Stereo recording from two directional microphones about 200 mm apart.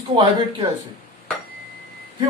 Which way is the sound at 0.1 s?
25° right (ahead or behind).